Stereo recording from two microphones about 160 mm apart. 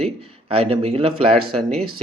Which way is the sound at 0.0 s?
35° right (ahead or behind).